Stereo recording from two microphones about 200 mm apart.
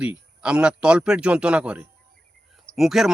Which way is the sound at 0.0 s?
5° right (ahead or behind).